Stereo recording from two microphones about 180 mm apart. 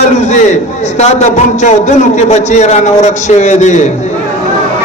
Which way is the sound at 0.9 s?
40° left (ahead or behind).